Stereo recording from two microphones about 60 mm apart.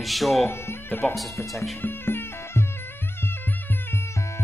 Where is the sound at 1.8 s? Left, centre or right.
Left.